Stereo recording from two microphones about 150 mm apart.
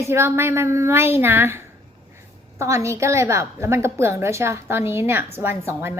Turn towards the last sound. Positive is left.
turn(degrees=-15)  # may be behind; listen again after turning